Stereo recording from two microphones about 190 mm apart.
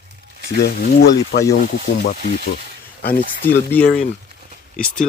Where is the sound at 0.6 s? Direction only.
60° left (ahead or behind).